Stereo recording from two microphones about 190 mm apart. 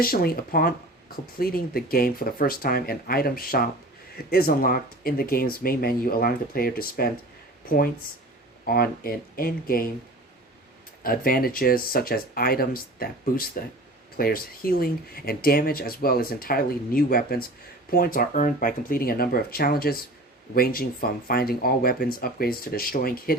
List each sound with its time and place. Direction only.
0.0 s speech: 55° left (ahead or behind)
8.6 s speech: 50° left (ahead or behind)
11.0 s speech: 50° left (ahead or behind)